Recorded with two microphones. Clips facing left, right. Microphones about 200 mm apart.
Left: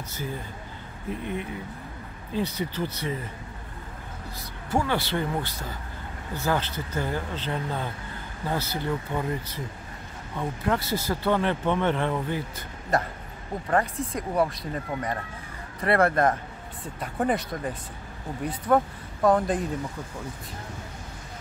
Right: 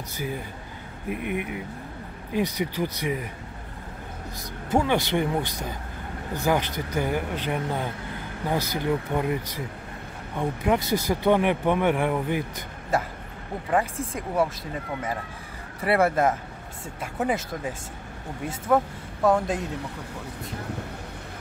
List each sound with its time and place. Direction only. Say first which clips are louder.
0.1 s speech: right 3 dB; 15° right (ahead or behind)
4.6 s speech: right 3 dB; 20° right (ahead or behind)
14.3 s speech: right 1 dB; centre (ahead or behind)